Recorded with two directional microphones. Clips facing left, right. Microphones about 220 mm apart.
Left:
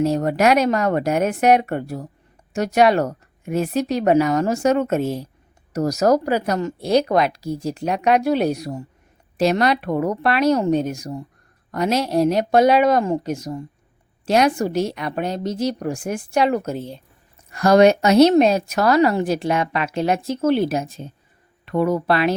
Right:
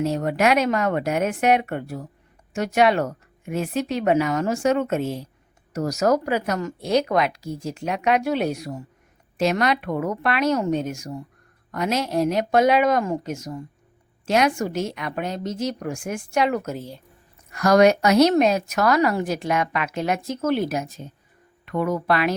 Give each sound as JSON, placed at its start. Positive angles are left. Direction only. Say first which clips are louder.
{"t": 0.0, "sound": "a woman's voice", "louder": "left 3 dB", "side_deg": 40}